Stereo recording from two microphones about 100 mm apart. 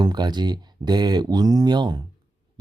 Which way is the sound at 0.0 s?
45° right (ahead or behind).